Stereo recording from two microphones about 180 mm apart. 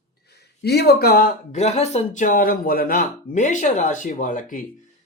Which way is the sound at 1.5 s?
40° left (ahead or behind).